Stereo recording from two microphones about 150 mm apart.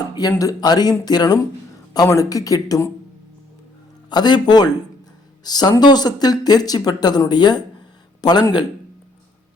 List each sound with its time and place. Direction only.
0.2 s speech: 25° left (ahead or behind)
4.1 s speech: 30° left (ahead or behind)